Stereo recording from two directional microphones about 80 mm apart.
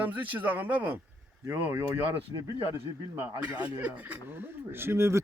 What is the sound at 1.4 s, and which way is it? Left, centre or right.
Speech, right.